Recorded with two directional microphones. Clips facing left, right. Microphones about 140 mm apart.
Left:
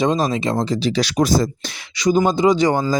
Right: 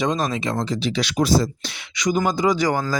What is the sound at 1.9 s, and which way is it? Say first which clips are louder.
Speech: left 5 dB; 30° left (ahead or behind).